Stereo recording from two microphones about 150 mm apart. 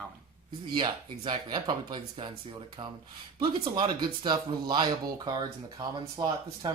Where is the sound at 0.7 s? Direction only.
30° right (ahead or behind).